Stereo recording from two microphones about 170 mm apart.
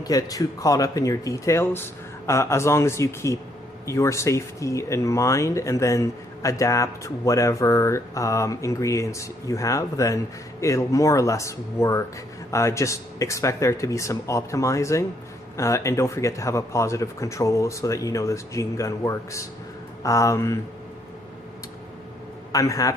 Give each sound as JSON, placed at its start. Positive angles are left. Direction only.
{"t": 0.0, "sound": "speech", "side_deg": 20}
{"t": 22.5, "sound": "speech", "side_deg": 20}